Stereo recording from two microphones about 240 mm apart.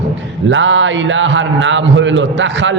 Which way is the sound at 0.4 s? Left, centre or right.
Right.